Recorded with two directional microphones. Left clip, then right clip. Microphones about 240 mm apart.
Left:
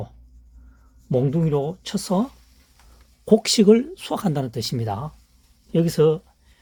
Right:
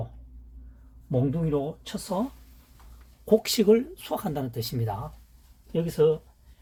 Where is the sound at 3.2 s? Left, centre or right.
Left.